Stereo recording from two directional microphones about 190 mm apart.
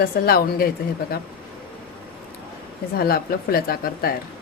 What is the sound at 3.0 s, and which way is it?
A woman's voice, 55° left (ahead or behind).